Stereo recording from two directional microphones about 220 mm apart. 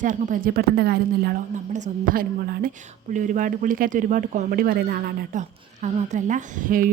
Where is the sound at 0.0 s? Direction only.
35° right (ahead or behind).